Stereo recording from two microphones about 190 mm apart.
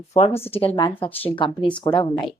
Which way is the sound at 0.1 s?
30° left (ahead or behind).